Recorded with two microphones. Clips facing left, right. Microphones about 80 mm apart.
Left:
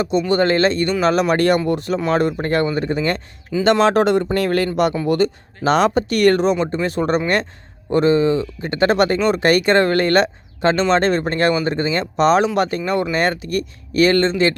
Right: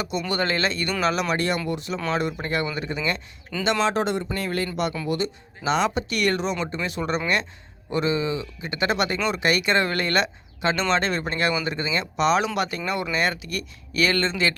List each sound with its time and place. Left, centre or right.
0.0 s speech: left
1.3 s speech: left
3.6 s speech: left
4.4 s speech: left
5.0 s speech: left